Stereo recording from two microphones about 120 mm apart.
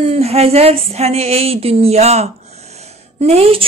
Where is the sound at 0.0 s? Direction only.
60° right (ahead or behind).